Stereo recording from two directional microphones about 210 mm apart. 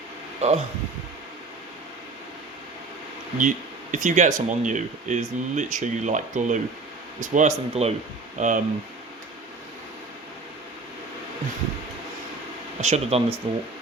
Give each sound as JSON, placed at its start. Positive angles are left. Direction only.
{"t": 0.4, "sound": "speech", "side_deg": -30}
{"t": 3.9, "sound": "speech", "side_deg": -35}
{"t": 12.8, "sound": "speech", "side_deg": -30}